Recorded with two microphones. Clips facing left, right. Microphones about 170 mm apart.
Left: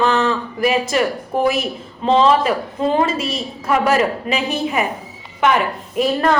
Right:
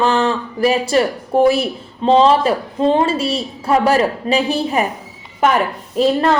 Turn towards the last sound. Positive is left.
turn(degrees=-25)  # may be behind; listen again after turning